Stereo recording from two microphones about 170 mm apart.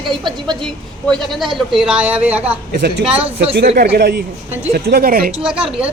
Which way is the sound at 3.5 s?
70° right (ahead or behind).